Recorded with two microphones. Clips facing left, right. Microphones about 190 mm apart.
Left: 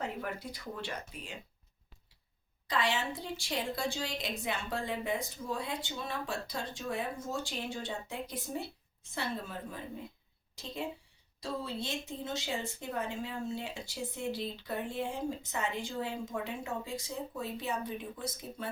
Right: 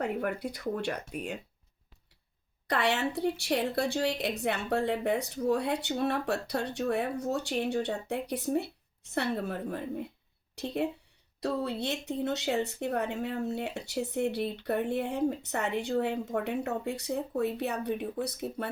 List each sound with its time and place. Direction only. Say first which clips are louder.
0.0 s a woman's voice: right 7 dB; 60° right (ahead or behind)
2.6 s a woman's voice: right 4 dB; 65° right (ahead or behind)